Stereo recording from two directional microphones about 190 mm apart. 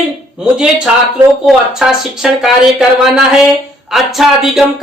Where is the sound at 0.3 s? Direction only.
5° right (ahead or behind).